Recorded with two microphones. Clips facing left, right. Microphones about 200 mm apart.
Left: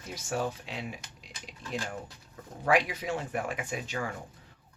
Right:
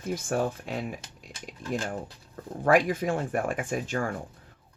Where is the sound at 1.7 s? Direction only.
35° right (ahead or behind).